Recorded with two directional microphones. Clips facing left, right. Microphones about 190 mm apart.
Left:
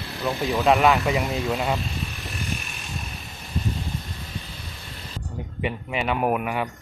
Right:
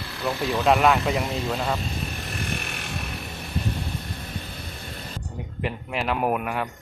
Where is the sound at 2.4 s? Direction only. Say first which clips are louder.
Right 1 dB; 55° right (ahead or behind); by 3.2 s 75° right (ahead or behind).